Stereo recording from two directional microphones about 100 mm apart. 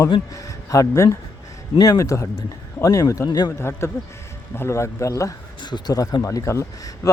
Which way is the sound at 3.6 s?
25° left (ahead or behind).